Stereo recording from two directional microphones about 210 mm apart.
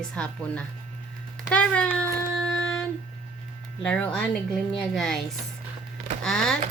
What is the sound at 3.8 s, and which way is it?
Speech, 5° left (ahead or behind).